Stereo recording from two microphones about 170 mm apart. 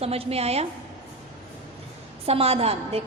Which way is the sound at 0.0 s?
35° right (ahead or behind).